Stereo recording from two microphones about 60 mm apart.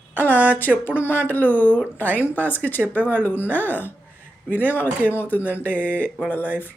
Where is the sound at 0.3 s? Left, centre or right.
Right.